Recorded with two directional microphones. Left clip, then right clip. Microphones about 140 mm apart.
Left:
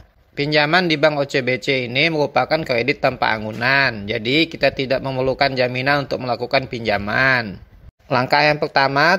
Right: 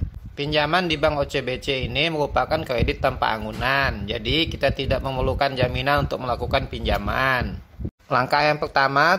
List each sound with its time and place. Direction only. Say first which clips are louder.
0.4 s speech: left 5 dB; 50° left (ahead or behind)